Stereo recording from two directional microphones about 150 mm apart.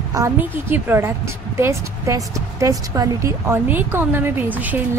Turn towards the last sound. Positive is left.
turn(degrees=-10)  # may be behind; listen again after turning